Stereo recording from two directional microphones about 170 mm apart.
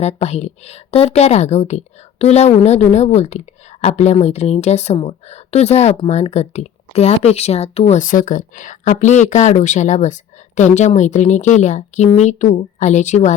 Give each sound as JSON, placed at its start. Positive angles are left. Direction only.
{"t": 0.0, "sound": "a woman's voice", "side_deg": 40}